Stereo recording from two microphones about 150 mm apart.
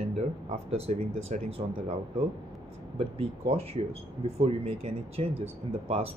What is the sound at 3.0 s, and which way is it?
Speech, 40° right (ahead or behind).